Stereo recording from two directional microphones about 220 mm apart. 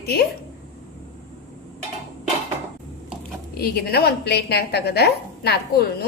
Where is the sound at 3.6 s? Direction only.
45° left (ahead or behind).